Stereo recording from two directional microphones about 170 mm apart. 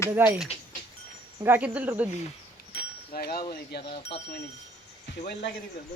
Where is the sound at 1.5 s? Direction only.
10° right (ahead or behind).